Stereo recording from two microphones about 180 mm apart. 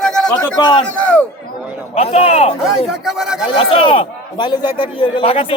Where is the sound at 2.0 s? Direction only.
35° left (ahead or behind).